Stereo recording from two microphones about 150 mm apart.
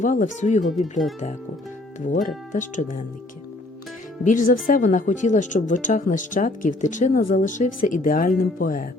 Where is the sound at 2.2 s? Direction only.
60° left (ahead or behind).